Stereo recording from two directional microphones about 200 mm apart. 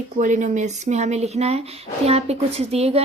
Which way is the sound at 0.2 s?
40° right (ahead or behind).